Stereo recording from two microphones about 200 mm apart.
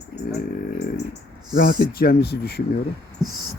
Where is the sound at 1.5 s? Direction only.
45° left (ahead or behind).